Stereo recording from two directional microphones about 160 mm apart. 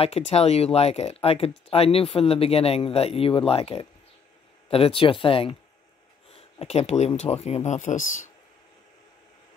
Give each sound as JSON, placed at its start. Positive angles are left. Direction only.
{"t": 0.0, "sound": "speech", "side_deg": 40}